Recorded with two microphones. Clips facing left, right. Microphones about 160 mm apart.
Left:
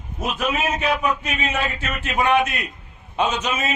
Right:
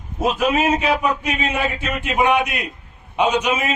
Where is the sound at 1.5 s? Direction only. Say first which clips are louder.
Right 3 dB; 10° right (ahead or behind).